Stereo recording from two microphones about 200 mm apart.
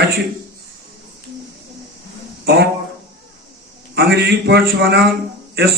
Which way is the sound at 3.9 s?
55° right (ahead or behind).